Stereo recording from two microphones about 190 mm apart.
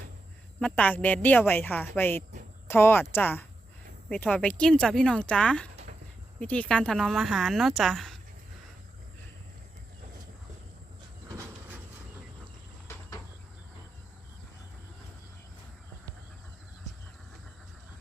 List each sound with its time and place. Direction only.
0.6 s a woman's voice: 5° left (ahead or behind)
11.3 s train: 15° right (ahead or behind)